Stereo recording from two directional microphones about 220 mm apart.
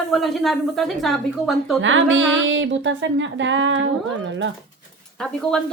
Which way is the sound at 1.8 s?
60° right (ahead or behind).